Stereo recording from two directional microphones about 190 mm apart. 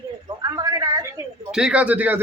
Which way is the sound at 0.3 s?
20° right (ahead or behind).